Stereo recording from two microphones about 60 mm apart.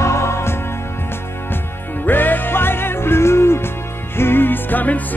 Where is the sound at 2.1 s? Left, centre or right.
Left.